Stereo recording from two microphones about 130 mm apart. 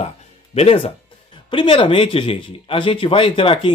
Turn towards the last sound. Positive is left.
turn(degrees=40)  # may be behind; listen again after turning